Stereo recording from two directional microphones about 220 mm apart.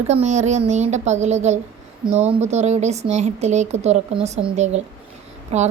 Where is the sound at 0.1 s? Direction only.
30° right (ahead or behind).